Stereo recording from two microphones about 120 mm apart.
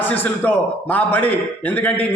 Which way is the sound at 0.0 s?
15° left (ahead or behind).